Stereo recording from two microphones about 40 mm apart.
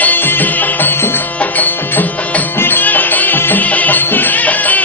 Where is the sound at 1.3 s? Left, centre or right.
Left.